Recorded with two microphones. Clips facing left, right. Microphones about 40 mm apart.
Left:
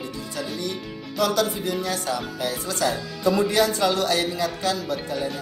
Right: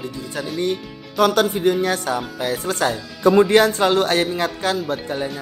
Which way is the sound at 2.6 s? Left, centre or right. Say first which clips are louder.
Right 2 dB; right.